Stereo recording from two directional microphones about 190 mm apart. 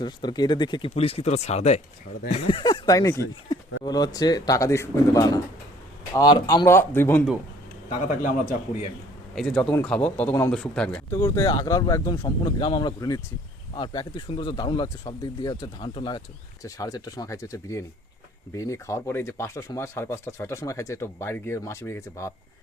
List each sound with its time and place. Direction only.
0.0 s speech: 25° left (ahead or behind)
7.9 s speech: 40° left (ahead or behind)
9.3 s a man's voice: centre (ahead or behind)